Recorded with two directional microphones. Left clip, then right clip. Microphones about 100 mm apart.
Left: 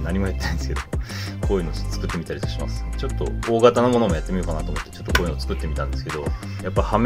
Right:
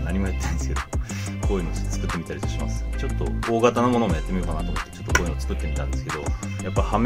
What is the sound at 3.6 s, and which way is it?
Speech, 20° left (ahead or behind).